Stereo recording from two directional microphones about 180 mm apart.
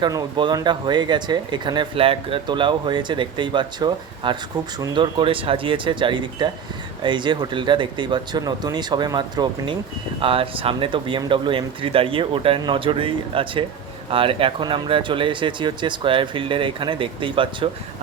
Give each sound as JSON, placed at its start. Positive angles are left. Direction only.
{"t": 0.0, "sound": "speech", "side_deg": -25}